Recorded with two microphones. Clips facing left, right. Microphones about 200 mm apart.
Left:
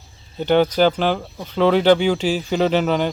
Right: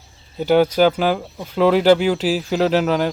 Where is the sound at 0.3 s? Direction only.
5° right (ahead or behind).